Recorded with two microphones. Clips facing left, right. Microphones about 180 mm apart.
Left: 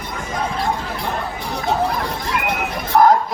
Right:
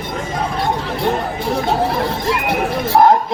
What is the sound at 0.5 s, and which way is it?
Chatter, 25° right (ahead or behind).